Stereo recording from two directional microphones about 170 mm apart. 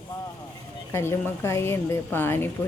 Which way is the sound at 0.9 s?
15° left (ahead or behind).